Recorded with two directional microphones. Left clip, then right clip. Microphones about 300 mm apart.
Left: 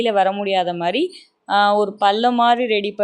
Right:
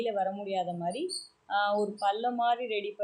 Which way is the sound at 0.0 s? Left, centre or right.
Left.